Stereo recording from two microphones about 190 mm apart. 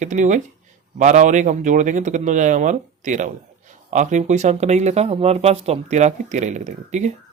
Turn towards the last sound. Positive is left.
turn(degrees=-35)  # may be behind; listen again after turning